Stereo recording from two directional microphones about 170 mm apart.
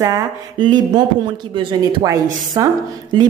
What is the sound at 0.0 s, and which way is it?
A woman's voice, 25° right (ahead or behind).